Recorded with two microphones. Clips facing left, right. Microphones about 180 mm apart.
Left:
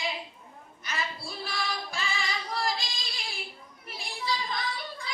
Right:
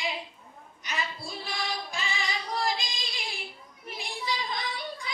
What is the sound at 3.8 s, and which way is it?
Children playing, 15° right (ahead or behind).